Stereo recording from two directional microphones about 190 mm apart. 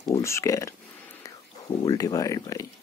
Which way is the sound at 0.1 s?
15° left (ahead or behind).